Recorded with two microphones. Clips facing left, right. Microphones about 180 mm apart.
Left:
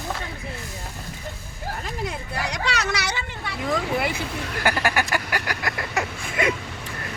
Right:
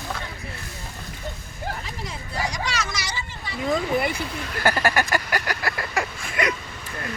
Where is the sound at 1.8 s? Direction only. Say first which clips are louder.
Left 5 dB; 60° left (ahead or behind).